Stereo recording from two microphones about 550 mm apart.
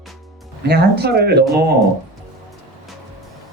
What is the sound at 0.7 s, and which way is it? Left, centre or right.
Speech, centre.